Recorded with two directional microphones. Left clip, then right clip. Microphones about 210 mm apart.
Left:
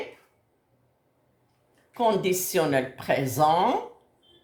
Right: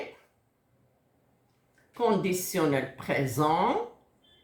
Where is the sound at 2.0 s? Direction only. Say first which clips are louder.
Left 3 dB; 45° left (ahead or behind).